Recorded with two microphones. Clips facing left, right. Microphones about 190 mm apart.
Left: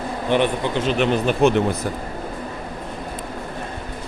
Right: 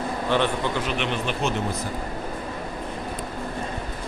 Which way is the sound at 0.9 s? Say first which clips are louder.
Left 8 dB; 40° left (ahead or behind).